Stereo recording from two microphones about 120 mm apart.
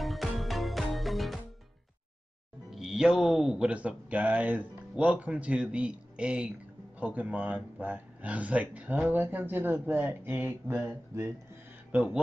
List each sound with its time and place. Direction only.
0.0 s music: centre (ahead or behind)
2.7 s speech: 5° right (ahead or behind)